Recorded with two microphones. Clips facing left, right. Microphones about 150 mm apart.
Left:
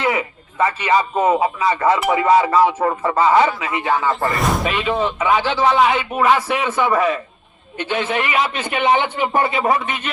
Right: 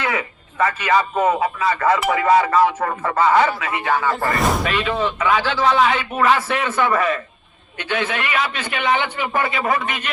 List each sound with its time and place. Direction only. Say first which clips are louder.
0.0 s a man's voice: left 3 dB; 25° left (ahead or behind)